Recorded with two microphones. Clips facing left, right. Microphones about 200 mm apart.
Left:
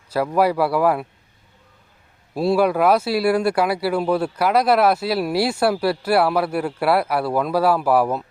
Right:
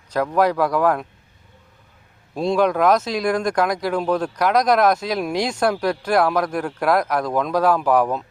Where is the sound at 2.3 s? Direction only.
5° left (ahead or behind).